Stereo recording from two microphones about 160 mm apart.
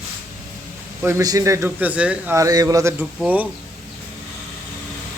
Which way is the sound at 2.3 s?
20° right (ahead or behind).